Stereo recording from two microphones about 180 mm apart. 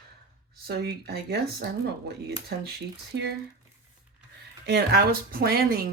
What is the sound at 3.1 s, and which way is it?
Speech, 75° right (ahead or behind).